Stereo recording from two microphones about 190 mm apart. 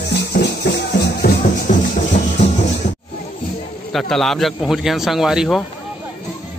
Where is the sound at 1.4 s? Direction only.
40° left (ahead or behind).